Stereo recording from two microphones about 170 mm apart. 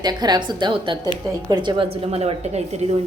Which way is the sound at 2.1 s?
40° right (ahead or behind).